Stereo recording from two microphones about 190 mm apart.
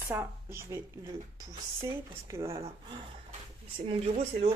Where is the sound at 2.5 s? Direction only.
25° right (ahead or behind).